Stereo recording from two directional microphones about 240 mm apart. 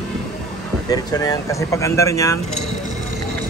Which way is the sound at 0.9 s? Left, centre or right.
Centre.